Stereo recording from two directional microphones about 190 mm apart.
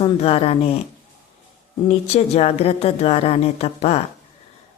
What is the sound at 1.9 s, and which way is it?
Speech, 35° left (ahead or behind).